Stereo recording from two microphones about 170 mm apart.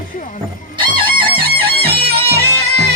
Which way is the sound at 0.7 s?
30° right (ahead or behind).